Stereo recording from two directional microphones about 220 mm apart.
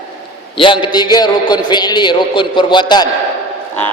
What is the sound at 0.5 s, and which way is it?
A man's voice, 20° left (ahead or behind).